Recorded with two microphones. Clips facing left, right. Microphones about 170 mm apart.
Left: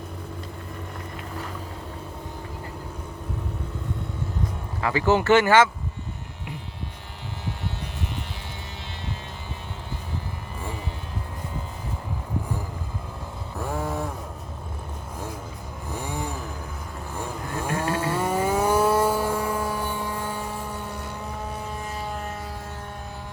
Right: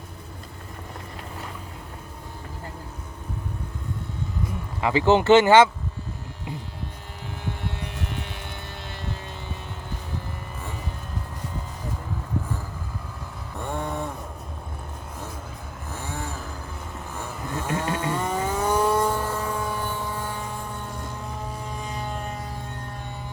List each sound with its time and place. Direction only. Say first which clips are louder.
4.8 s speech: right 2 dB; 20° right (ahead or behind)
13.6 s vehicle: left 1 dB; 5° left (ahead or behind)
15.9 s chainsaw: left 3 dB; 15° left (ahead or behind)
17.2 s vehicle: left 1 dB; 10° left (ahead or behind)